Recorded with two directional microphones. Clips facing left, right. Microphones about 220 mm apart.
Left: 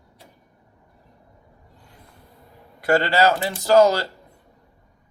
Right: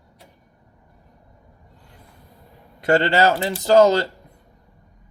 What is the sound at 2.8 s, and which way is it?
A man's voice, 20° right (ahead or behind).